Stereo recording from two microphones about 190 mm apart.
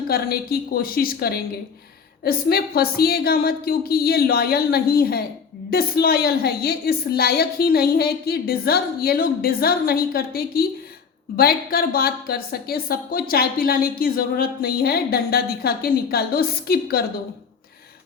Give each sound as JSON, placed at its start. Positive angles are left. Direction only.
{"t": 0.1, "sound": "a woman's voice", "side_deg": 55}